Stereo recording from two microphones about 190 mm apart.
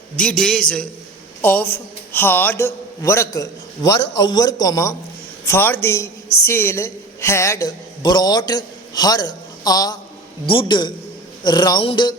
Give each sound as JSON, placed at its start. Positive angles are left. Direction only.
{"t": 0.2, "sound": "a man's voice", "side_deg": 5}